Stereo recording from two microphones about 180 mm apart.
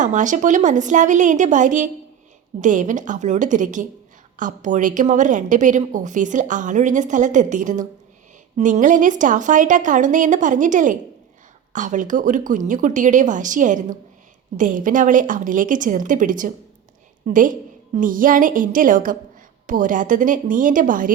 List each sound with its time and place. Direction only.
0.0 s a woman's voice: 45° right (ahead or behind)